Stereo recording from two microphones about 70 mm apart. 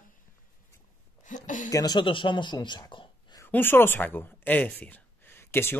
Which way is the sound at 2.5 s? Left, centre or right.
Left.